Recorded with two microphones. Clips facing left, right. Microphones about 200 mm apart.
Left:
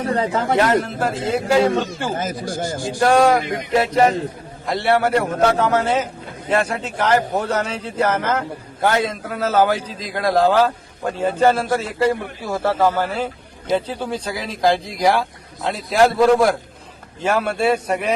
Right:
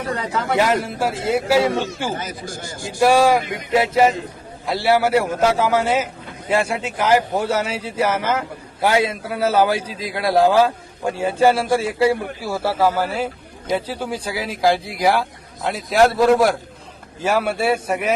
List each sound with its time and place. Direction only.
0.0 s speech: 30° left (ahead or behind)
0.6 s a man's voice: 10° right (ahead or behind)
2.5 s a man's voice: 50° left (ahead or behind)
3.0 s a man's voice: 5° right (ahead or behind)